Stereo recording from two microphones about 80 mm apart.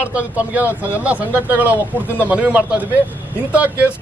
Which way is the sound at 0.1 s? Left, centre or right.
Centre.